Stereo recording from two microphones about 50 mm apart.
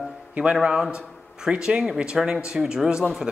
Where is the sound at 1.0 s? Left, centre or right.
Centre.